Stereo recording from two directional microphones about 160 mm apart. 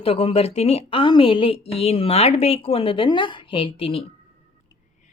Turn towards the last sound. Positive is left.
turn(degrees=35)  # may be behind; listen again after turning